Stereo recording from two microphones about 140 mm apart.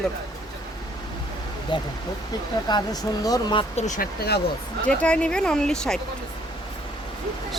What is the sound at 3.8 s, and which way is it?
Speech, 65° left (ahead or behind).